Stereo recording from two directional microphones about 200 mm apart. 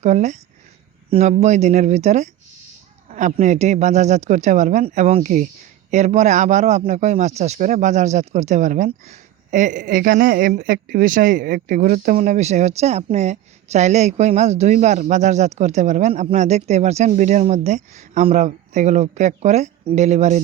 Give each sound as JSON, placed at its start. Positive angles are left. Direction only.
{"t": 0.0, "sound": "a man's voice", "side_deg": -35}